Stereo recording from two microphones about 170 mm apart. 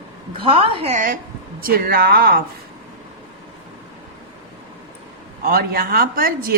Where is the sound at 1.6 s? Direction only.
60° right (ahead or behind).